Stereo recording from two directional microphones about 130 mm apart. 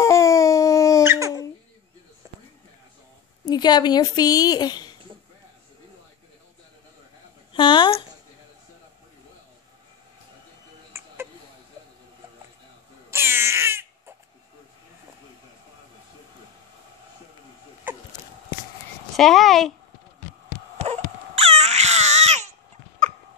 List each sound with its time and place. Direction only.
0.0 s dog: 25° left (ahead or behind)
1.0 s dog: 20° right (ahead or behind)
3.4 s a woman's voice: 35° left (ahead or behind)
7.5 s a woman's voice: 40° left (ahead or behind)
10.9 s a sound: 20° right (ahead or behind)
13.1 s baby cry: 20° right (ahead or behind)
19.1 s a sound: centre (ahead or behind)
20.7 s baby cry: 55° right (ahead or behind)